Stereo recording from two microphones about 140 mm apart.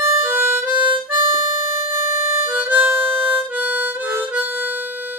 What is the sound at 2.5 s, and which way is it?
Harmonica, 15° right (ahead or behind).